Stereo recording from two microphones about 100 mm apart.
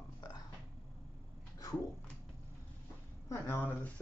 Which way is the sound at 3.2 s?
25° left (ahead or behind).